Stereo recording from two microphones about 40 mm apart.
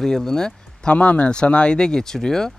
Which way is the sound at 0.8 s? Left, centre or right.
Left.